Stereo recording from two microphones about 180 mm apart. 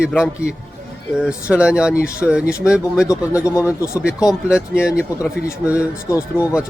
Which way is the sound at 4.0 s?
5° right (ahead or behind).